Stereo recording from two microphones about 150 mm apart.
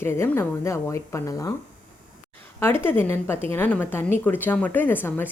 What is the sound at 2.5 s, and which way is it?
A woman's voice, 15° left (ahead or behind).